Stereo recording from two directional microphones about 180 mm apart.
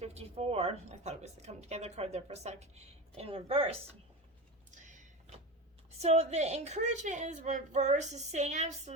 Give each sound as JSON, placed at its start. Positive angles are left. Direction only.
{"t": 0.0, "sound": "a woman's voice", "side_deg": -35}
{"t": 4.7, "sound": "a sound", "side_deg": -45}
{"t": 6.0, "sound": "a woman's voice", "side_deg": -35}